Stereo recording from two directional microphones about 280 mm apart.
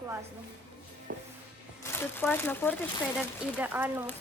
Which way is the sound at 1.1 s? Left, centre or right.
Right.